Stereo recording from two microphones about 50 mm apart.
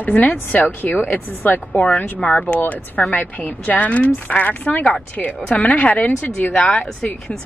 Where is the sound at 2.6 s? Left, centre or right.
Left.